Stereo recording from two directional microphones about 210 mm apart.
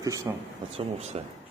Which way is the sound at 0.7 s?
30° right (ahead or behind).